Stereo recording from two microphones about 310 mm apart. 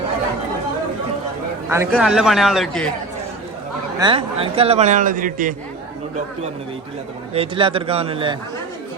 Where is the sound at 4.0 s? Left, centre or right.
Centre.